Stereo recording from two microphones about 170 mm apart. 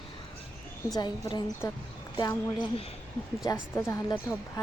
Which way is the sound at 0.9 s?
25° left (ahead or behind).